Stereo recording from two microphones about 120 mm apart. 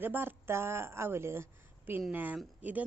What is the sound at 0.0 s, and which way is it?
A woman's voice, 15° right (ahead or behind).